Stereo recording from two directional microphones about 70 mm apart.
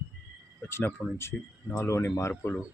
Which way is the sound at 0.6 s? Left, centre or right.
Left.